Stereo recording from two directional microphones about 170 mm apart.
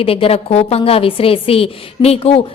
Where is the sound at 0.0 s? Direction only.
35° left (ahead or behind).